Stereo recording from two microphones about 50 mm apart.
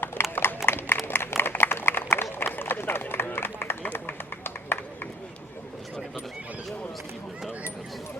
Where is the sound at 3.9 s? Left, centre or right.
Left.